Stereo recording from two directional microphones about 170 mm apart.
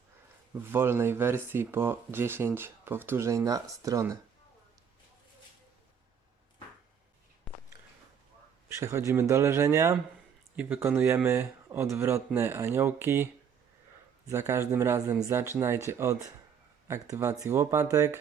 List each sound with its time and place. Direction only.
0.7 s speech: 15° right (ahead or behind)
7.5 s a sound: centre (ahead or behind)
8.7 s speech: 15° right (ahead or behind)
14.3 s speech: 15° right (ahead or behind)